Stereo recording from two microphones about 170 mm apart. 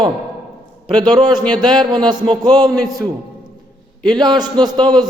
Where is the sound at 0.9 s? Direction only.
25° right (ahead or behind).